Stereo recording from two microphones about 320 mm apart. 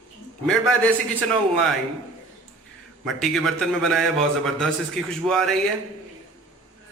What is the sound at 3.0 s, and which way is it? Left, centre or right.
A man's voice, centre.